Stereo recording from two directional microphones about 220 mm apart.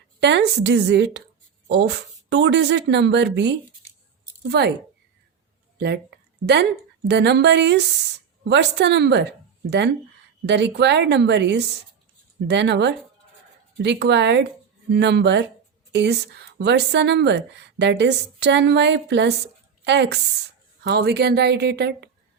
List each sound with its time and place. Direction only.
0.2 s a woman's voice: 50° right (ahead or behind)
5.8 s a woman's voice: 50° right (ahead or behind)